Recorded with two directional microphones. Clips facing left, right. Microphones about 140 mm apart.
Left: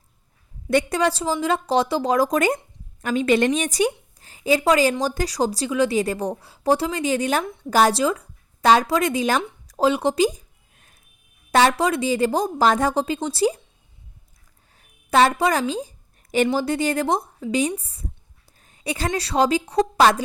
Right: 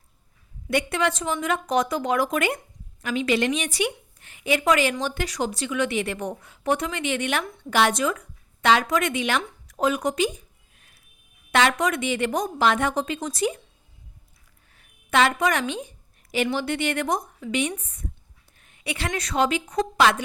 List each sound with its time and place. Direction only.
0.7 s a woman's voice: 40° left (ahead or behind)
9.6 s a sound: 30° left (ahead or behind)
11.5 s speech: 35° left (ahead or behind)
14.8 s a woman's voice: 35° left (ahead or behind)